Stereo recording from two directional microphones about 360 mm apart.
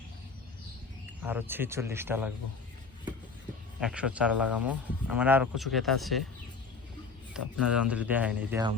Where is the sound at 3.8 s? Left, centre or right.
Centre.